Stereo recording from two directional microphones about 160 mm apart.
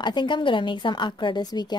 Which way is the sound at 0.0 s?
30° left (ahead or behind).